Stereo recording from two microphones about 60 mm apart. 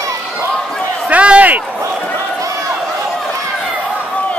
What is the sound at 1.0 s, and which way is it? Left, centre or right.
Run, right.